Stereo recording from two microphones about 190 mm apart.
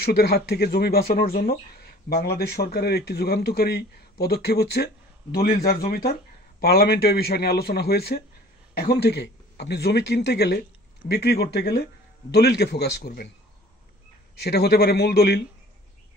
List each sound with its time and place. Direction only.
0.0 s speech: 60° left (ahead or behind)
14.4 s speech: 60° left (ahead or behind)